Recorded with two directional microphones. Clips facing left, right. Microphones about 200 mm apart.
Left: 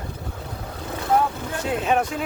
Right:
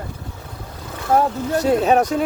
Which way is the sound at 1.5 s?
40° right (ahead or behind).